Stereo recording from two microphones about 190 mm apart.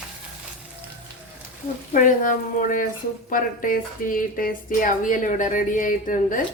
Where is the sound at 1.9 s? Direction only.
45° left (ahead or behind).